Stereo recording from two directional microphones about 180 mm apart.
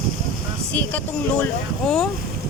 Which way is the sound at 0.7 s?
10° left (ahead or behind).